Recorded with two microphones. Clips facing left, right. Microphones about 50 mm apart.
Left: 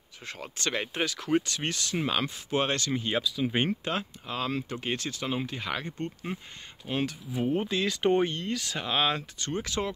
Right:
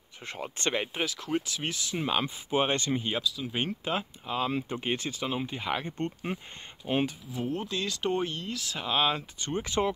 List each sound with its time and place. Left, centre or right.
0.2 s speech: right
0.9 s speech: centre
3.1 s speech: centre
3.8 s speech: centre
5.2 s speech: centre
5.5 s speech: centre
6.3 s speech: right
7.5 s speech: centre
9.4 s speech: right